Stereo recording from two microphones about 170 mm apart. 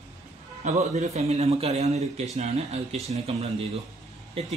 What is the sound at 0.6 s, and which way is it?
A man's voice, 45° right (ahead or behind).